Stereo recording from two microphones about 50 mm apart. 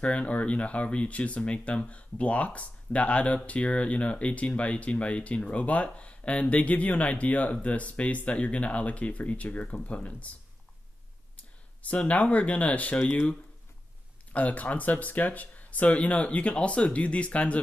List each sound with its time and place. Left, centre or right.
0.0 s speech: left
11.3 s speech: left
14.3 s speech: left